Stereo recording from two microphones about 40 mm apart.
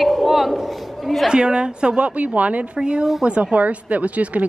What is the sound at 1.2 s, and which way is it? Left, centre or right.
A woman's voice, right.